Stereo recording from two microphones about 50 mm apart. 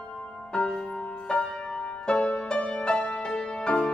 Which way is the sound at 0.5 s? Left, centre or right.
Centre.